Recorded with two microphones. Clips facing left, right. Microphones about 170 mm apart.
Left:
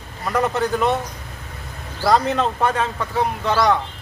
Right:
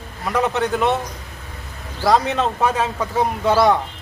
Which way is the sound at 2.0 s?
Centre (ahead or behind).